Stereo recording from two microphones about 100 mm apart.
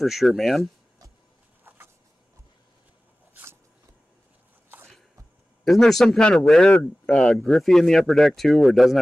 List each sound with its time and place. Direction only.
0.0 s speech: centre (ahead or behind)
1.6 s vehicle: 20° right (ahead or behind)
5.7 s speech: 5° left (ahead or behind)